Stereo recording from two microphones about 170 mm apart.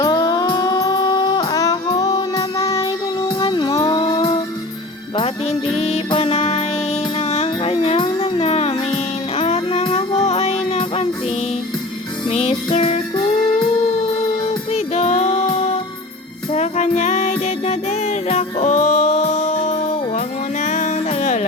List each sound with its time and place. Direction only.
0.0 s music: 20° left (ahead or behind)
2.6 s child singing: 35° left (ahead or behind)
3.8 s a sound: 30° left (ahead or behind)
5.1 s music: 30° left (ahead or behind)
12.3 s music: 35° left (ahead or behind)